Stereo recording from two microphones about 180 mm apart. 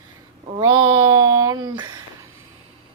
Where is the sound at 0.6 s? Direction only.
20° right (ahead or behind).